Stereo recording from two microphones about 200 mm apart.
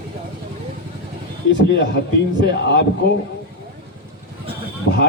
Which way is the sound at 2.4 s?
60° left (ahead or behind).